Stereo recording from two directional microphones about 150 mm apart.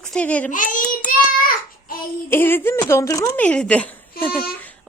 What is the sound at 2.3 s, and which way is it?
Speech, 15° left (ahead or behind).